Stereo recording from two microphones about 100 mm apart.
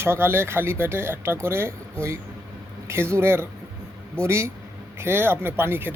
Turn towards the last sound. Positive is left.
turn(degrees=-20)  # may be behind; listen again after turning